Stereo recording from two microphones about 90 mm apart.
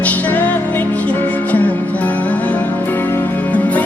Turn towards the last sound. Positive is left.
turn(degrees=15)  # may be behind; listen again after turning